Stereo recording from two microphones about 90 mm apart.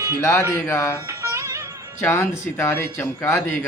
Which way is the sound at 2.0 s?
30° left (ahead or behind).